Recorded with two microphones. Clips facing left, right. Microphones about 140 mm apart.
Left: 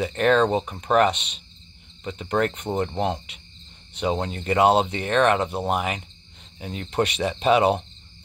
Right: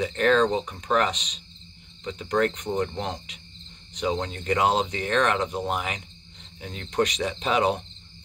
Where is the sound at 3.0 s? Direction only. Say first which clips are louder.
Left 7 dB; 5° left (ahead or behind).